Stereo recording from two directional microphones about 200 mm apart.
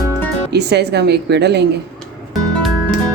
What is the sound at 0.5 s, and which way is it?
Speech, 55° right (ahead or behind).